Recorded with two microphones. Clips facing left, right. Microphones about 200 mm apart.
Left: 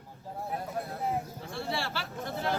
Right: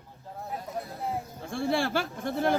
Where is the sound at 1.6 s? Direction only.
50° right (ahead or behind).